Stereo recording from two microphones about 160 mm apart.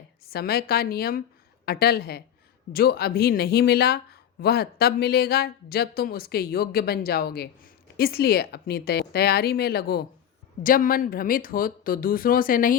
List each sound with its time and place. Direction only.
0.3 s speech: 75° left (ahead or behind)
10.6 s speech: 60° left (ahead or behind)